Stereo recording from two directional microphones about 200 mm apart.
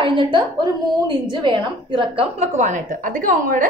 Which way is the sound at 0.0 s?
25° right (ahead or behind).